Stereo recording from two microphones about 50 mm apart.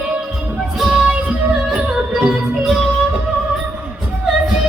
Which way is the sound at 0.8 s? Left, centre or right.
Centre.